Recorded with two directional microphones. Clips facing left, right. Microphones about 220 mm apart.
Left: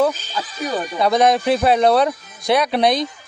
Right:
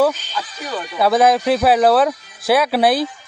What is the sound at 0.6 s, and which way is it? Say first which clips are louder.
Speech: left 6 dB; 45° left (ahead or behind).